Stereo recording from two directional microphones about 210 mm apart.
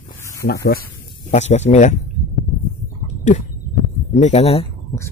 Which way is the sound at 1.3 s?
35° left (ahead or behind).